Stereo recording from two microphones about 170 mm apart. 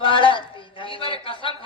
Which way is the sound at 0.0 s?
30° left (ahead or behind).